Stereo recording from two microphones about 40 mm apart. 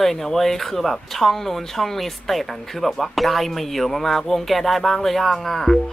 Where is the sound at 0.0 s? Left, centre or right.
Centre.